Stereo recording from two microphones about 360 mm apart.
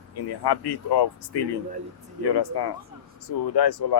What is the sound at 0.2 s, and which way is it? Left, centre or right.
Speech, left.